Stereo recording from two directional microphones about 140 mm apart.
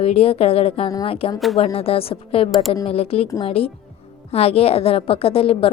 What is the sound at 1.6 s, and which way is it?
A woman's voice, 45° left (ahead or behind).